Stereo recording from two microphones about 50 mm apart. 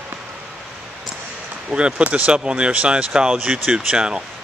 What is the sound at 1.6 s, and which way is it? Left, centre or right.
Speech, right.